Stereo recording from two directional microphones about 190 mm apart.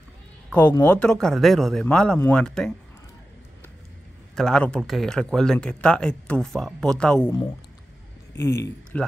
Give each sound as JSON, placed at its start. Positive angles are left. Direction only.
{"t": 0.6, "sound": "speech", "side_deg": 20}
{"t": 0.8, "sound": "speech", "side_deg": 5}
{"t": 4.4, "sound": "speech", "side_deg": 5}
{"t": 8.4, "sound": "a man's voice", "side_deg": 15}